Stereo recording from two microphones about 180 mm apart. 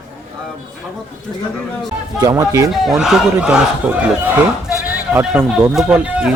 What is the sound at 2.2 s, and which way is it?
Speech, 20° right (ahead or behind).